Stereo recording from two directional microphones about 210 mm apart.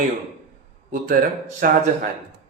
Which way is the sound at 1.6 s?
40° right (ahead or behind).